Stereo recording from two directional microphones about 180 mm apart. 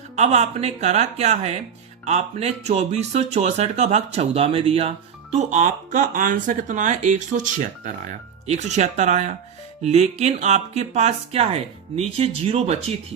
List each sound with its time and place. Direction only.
0.2 s speech: 35° right (ahead or behind)